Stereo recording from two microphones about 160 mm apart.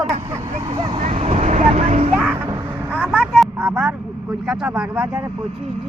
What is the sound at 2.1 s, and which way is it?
Speech, centre (ahead or behind).